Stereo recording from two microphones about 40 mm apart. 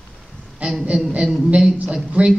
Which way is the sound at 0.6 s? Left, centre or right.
Right.